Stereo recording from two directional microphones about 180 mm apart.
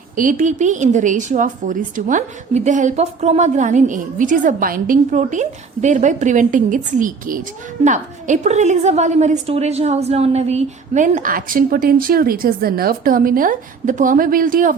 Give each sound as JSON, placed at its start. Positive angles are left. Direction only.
{"t": 0.2, "sound": "a woman's voice", "side_deg": -45}